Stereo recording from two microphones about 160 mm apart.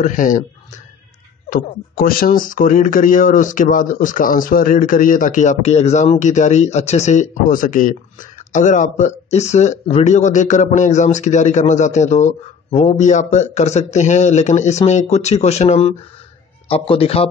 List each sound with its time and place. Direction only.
0.0 s speech: 55° left (ahead or behind)
1.5 s a man's voice: 65° left (ahead or behind); by 17.3 s 35° left (ahead or behind)